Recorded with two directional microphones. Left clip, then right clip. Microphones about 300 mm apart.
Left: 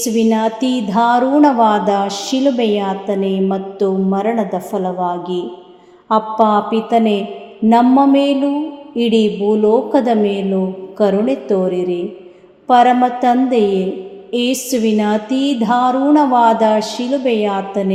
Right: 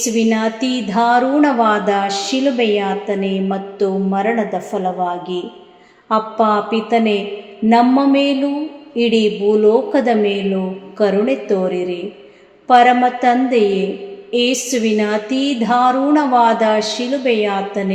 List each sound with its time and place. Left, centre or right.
0.0 s a woman's voice: centre